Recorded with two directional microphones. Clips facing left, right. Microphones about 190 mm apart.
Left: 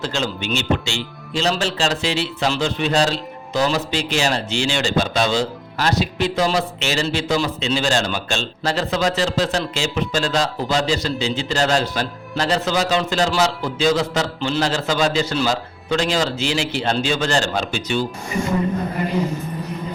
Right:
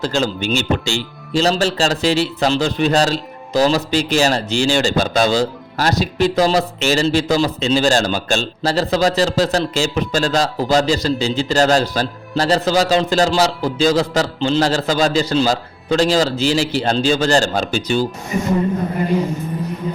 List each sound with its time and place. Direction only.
0.0 s speech: 40° right (ahead or behind)